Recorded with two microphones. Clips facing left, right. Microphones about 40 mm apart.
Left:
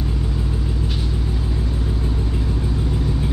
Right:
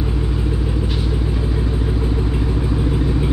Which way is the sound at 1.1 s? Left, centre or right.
Centre.